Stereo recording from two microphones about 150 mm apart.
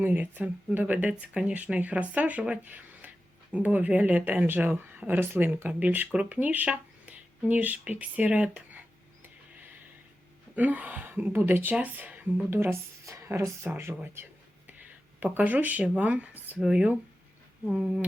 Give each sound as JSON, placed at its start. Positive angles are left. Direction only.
{"t": 0.0, "sound": "speech", "side_deg": -10}
{"t": 10.5, "sound": "speech", "side_deg": -10}